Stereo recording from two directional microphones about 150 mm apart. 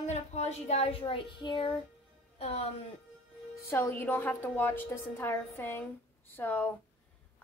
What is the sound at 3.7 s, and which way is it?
A woman's voice, 15° left (ahead or behind).